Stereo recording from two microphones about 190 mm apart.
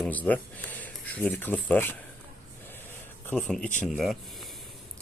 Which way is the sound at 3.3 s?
5° left (ahead or behind).